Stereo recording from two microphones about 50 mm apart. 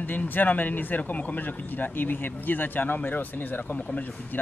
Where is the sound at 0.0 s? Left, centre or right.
Left.